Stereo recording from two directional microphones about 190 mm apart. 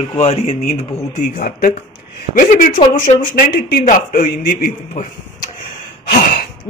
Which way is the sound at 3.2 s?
50° left (ahead or behind).